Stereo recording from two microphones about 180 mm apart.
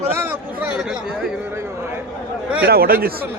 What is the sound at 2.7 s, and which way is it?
Speech, 55° right (ahead or behind).